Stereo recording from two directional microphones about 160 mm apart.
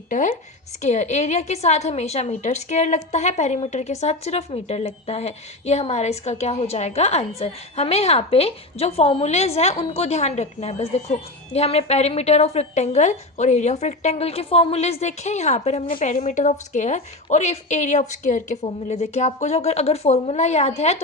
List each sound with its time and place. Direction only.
0.1 s a woman's voice: 55° left (ahead or behind)